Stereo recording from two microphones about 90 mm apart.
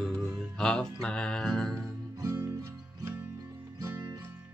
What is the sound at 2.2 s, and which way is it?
Music, 40° right (ahead or behind).